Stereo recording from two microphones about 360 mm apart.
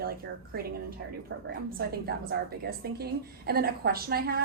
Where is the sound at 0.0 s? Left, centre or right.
Right.